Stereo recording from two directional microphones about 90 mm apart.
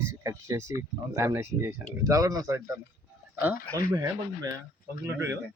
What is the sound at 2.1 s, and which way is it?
Speech, 40° right (ahead or behind).